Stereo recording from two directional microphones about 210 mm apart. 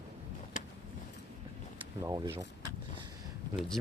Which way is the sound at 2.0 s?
15° right (ahead or behind).